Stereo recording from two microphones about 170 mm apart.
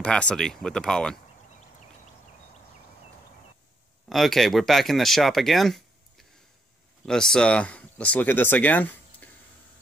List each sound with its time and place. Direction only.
0.0 s speech: 5° left (ahead or behind)
4.1 s speech: centre (ahead or behind)